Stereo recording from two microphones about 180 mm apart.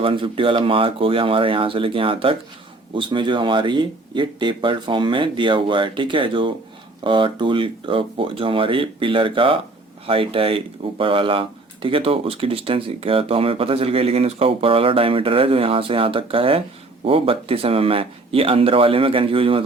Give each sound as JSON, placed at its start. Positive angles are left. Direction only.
{"t": 0.0, "sound": "a man's voice", "side_deg": -30}